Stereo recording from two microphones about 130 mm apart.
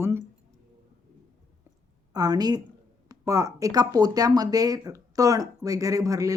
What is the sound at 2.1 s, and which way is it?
A woman's voice, 30° right (ahead or behind).